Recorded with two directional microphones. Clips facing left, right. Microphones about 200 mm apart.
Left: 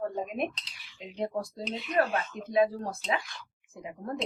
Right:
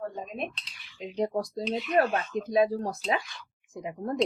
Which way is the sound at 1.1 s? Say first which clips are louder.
Right 4 dB; 35° right (ahead or behind).